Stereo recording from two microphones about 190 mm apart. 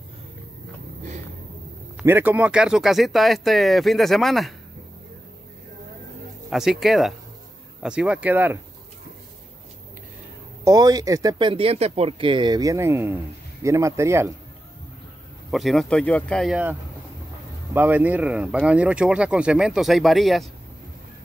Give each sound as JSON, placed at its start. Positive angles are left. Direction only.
{"t": 2.0, "sound": "speech", "side_deg": -10}
{"t": 6.5, "sound": "speech", "side_deg": 0}
{"t": 10.6, "sound": "speech", "side_deg": -20}
{"t": 15.5, "sound": "speech", "side_deg": 0}
{"t": 17.7, "sound": "speech", "side_deg": -10}